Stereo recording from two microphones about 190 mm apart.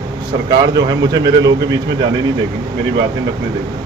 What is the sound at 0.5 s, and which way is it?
A man's voice, 20° right (ahead or behind).